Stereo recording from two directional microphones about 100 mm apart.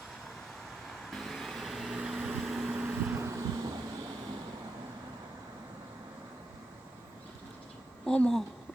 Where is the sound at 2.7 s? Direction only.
15° right (ahead or behind).